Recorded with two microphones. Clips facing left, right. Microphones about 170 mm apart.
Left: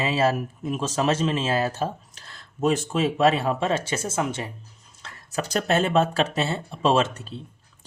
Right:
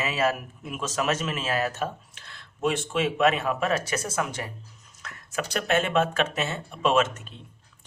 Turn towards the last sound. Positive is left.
turn(degrees=35)  # may be behind; listen again after turning